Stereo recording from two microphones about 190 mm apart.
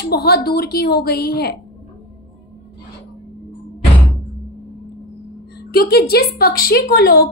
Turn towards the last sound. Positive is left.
turn(degrees=50)  # may be behind; listen again after turning